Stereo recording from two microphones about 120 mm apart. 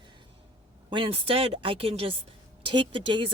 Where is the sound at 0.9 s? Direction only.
50° right (ahead or behind).